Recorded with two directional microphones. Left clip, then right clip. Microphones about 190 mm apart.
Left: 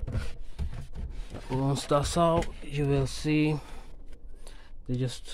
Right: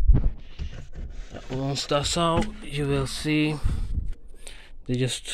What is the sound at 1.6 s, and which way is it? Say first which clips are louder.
Speech: right 2 dB; 20° left (ahead or behind).